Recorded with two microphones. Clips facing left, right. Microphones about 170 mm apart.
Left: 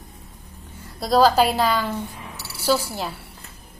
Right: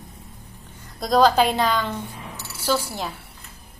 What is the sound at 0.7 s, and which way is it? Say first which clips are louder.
A woman's voice: left 1 dB; 5° left (ahead or behind).